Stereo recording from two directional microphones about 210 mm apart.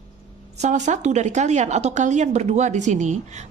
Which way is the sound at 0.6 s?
35° right (ahead or behind).